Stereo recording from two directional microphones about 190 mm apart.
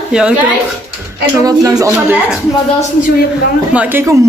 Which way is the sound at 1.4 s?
20° right (ahead or behind).